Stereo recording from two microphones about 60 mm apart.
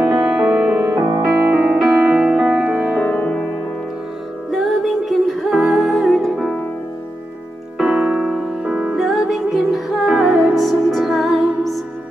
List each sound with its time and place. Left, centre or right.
0.0 s music: centre
1.2 s music: centre
3.0 s music: centre
4.5 s music: centre
7.9 s piano: centre
8.9 s music: centre